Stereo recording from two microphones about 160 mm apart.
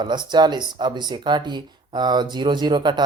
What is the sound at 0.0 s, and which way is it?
Speech, 30° right (ahead or behind).